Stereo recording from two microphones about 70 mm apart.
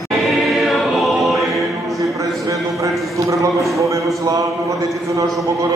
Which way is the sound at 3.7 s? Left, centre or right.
Right.